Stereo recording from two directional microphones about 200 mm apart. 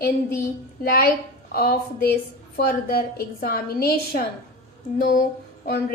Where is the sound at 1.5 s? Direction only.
50° left (ahead or behind).